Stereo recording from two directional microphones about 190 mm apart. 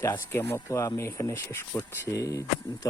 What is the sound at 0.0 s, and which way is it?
Speech, 10° left (ahead or behind).